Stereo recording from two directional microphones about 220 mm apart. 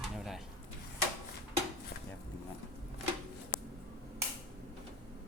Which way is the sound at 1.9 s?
50° left (ahead or behind).